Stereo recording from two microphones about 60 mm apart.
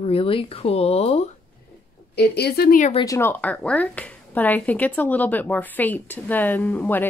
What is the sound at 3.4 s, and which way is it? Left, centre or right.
Speech, left.